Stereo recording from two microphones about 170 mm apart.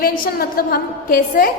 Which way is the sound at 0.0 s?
60° left (ahead or behind).